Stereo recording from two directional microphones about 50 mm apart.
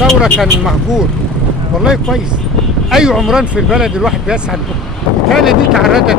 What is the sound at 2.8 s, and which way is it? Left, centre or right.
Speech, centre.